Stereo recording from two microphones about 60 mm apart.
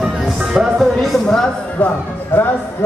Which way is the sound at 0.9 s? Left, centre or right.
Centre.